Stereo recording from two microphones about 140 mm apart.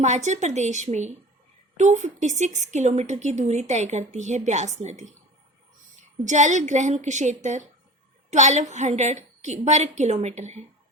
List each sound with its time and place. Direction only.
0.0 s a woman's voice: 55° right (ahead or behind)
6.2 s a woman's voice: 60° right (ahead or behind)